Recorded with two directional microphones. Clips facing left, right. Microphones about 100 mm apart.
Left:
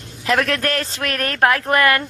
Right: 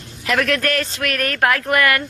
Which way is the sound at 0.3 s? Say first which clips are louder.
Even; 25° left (ahead or behind).